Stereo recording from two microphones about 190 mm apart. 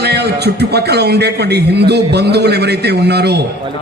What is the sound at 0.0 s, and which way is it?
A man's voice, 60° right (ahead or behind).